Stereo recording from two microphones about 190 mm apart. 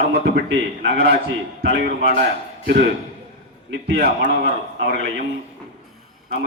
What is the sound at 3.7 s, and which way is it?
A man's voice, 60° right (ahead or behind).